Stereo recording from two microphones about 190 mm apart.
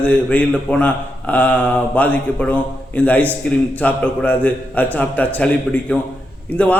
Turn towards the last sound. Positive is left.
turn(degrees=5)  # may be behind; listen again after turning